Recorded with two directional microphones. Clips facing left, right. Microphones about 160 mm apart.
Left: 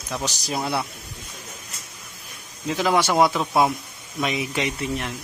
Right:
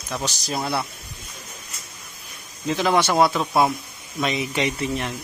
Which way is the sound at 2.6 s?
5° left (ahead or behind).